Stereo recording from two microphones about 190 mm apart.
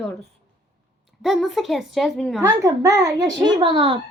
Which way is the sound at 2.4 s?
15° right (ahead or behind).